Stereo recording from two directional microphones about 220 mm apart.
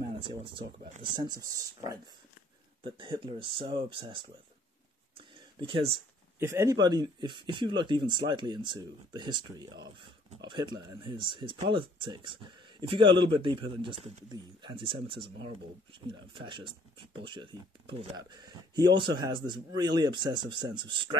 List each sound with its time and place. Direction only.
0.2 s speech: 25° right (ahead or behind)
5.1 s a sound: 25° right (ahead or behind)
6.4 s speech: 15° right (ahead or behind)